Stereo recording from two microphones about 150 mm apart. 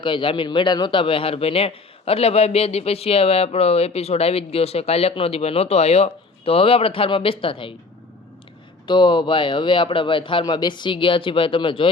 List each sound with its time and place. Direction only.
0.0 s a man's voice: 35° left (ahead or behind)
8.9 s a man's voice: 30° left (ahead or behind)